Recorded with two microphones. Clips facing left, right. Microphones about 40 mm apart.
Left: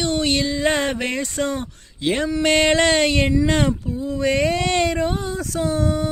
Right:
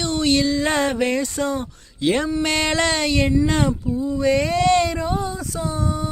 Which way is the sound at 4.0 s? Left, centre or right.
Left.